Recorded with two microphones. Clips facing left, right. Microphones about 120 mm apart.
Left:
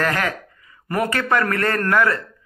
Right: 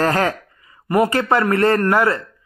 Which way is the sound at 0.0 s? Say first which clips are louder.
Right 4 dB; 35° right (ahead or behind).